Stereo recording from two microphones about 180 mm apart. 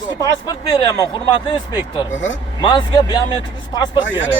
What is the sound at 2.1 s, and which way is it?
Speech, 90° left.